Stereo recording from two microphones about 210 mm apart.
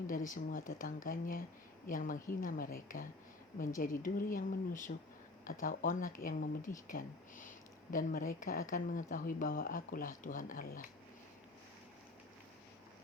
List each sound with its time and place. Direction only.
0.1 s a woman's voice: 40° left (ahead or behind)